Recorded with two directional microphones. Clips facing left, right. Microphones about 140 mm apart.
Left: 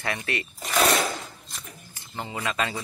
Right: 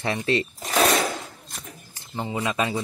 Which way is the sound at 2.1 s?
20° right (ahead or behind).